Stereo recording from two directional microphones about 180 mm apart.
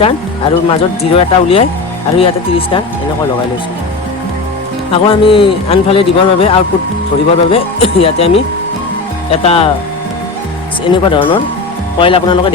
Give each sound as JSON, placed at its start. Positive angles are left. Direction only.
{"t": 0.7, "sound": "a man's voice", "side_deg": 30}
{"t": 4.9, "sound": "a man's voice", "side_deg": 30}
{"t": 10.8, "sound": "speech", "side_deg": 25}